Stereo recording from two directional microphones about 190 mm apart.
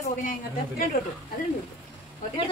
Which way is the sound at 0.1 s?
45° left (ahead or behind).